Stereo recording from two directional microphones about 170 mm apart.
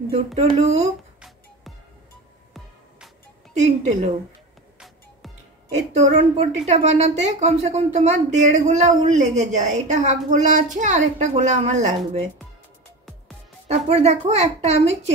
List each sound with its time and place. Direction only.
0.4 s a woman's voice: 40° right (ahead or behind)
3.5 s a woman's voice: 40° right (ahead or behind)
4.7 s music: centre (ahead or behind)
5.8 s a woman's voice: 40° right (ahead or behind)
13.7 s a woman's voice: 40° right (ahead or behind)